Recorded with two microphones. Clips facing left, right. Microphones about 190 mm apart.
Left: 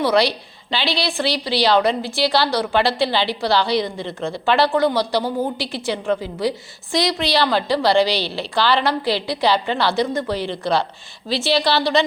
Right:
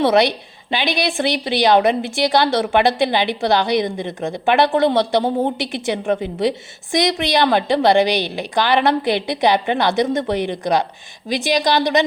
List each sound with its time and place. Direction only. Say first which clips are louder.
0.0 s a woman's voice: right 3 dB; 20° right (ahead or behind)